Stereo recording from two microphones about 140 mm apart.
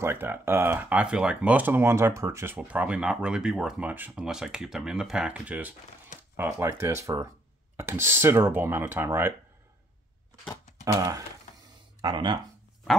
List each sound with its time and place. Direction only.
0.0 s speech: 15° right (ahead or behind)
10.9 s speech: 25° right (ahead or behind)